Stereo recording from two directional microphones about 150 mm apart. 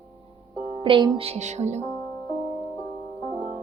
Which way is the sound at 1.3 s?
50° right (ahead or behind).